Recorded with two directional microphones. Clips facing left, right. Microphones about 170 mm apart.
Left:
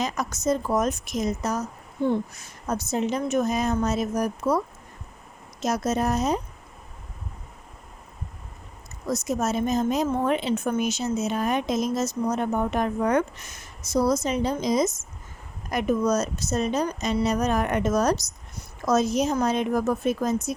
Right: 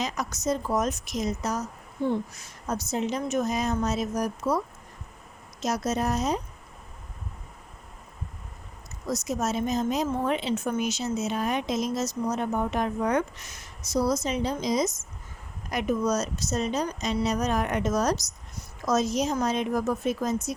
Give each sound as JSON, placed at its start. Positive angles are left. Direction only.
{"t": 0.0, "sound": "a woman's voice", "side_deg": 50}
{"t": 9.0, "sound": "a woman's voice", "side_deg": 55}